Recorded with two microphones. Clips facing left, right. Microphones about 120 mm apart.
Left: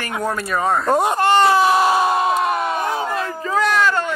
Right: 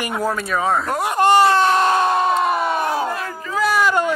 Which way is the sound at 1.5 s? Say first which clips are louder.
Left 1 dB; 5° left (ahead or behind).